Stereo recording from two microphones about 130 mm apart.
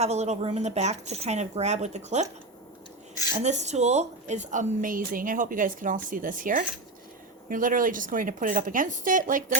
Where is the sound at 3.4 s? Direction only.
60° right (ahead or behind).